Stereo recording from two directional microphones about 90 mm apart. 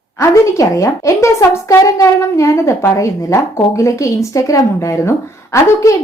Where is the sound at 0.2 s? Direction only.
35° left (ahead or behind).